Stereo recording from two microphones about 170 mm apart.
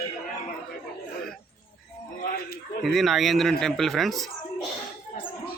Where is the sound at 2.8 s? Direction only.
Centre (ahead or behind).